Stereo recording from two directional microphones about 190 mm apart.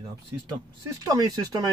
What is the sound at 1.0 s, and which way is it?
Speech, 20° right (ahead or behind).